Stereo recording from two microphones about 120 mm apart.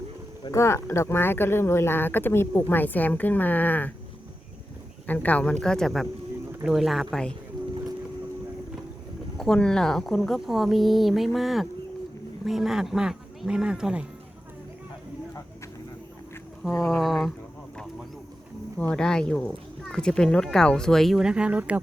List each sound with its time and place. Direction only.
0.5 s speech: 20° left (ahead or behind)
5.0 s speech: 15° left (ahead or behind)
9.4 s speech: 5° left (ahead or behind)
16.8 s speech: centre (ahead or behind)
18.8 s speech: 10° left (ahead or behind); by 21.8 s 10° right (ahead or behind)